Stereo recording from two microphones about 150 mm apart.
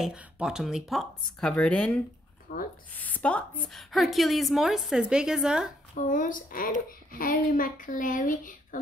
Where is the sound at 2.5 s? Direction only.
90° left.